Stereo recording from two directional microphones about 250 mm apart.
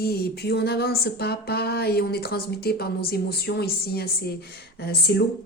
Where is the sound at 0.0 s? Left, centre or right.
Left.